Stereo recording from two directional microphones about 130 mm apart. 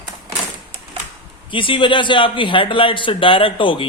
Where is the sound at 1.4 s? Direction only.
40° left (ahead or behind).